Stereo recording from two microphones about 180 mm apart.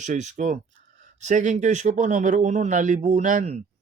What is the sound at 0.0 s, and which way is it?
Speech, 40° right (ahead or behind).